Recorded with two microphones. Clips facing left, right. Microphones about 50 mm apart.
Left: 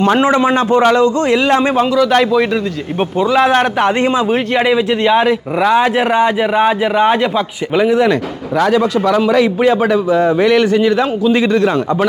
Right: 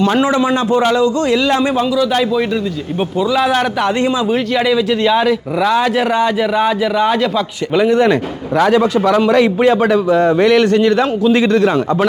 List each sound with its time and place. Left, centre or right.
0.0 s speech: left
1.8 s speech: left
3.2 s a man's voice: left
7.8 s a man's voice: centre